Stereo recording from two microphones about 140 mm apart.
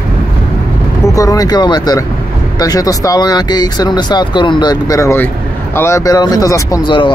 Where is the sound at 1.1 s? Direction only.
25° left (ahead or behind).